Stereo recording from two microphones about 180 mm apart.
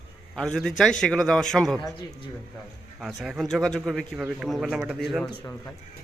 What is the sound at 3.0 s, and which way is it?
A man's voice, centre (ahead or behind).